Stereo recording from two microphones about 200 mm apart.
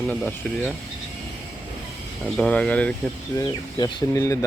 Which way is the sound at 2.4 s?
5° left (ahead or behind).